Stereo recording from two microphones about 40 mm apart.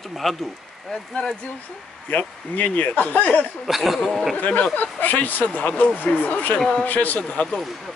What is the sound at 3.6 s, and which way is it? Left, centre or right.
Speech, centre.